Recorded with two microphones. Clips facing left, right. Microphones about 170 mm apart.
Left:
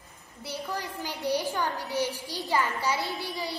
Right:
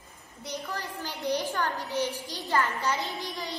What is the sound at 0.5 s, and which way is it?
A woman's voice, 10° left (ahead or behind).